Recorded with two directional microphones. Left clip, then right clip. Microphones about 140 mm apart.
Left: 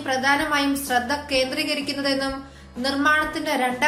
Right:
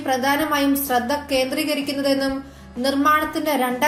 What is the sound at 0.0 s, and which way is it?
Speech, 45° right (ahead or behind).